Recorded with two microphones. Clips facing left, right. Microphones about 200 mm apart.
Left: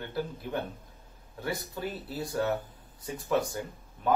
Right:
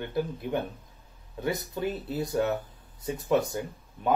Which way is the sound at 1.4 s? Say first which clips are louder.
Right 4 dB; 20° right (ahead or behind).